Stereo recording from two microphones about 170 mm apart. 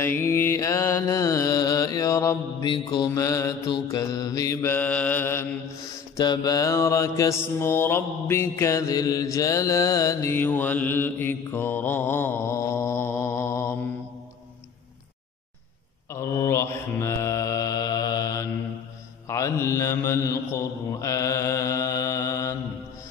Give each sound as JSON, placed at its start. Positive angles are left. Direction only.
{"t": 0.0, "sound": "mantra", "side_deg": 15}
{"t": 6.1, "sound": "mantra", "side_deg": 25}
{"t": 16.1, "sound": "mantra", "side_deg": 20}